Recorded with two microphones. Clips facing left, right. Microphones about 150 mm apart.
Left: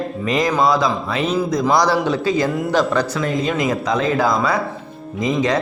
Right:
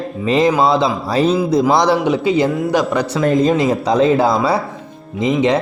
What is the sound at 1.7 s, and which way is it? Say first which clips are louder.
Speech: right 3 dB; 20° right (ahead or behind).